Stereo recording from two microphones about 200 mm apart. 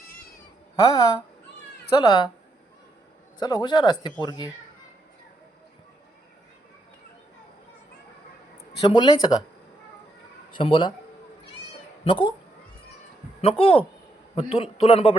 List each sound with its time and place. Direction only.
0.8 s a man's voice: 15° left (ahead or behind)
3.4 s a man's voice: 20° left (ahead or behind)
8.8 s a man's voice: 25° left (ahead or behind)
10.5 s a man's voice: 25° left (ahead or behind)
12.0 s a man's voice: 25° left (ahead or behind)
13.4 s a man's voice: 25° left (ahead or behind)